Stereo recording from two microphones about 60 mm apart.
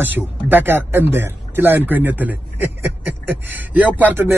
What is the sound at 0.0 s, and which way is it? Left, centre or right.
A man's voice, right.